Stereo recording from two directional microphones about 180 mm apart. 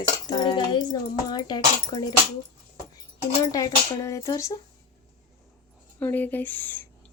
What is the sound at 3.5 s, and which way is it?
Speech, 20° left (ahead or behind).